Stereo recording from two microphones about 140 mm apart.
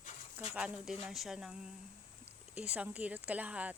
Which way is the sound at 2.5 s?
10° right (ahead or behind).